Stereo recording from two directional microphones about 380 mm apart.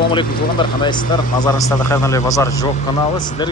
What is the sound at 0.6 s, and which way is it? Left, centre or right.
Speech, centre.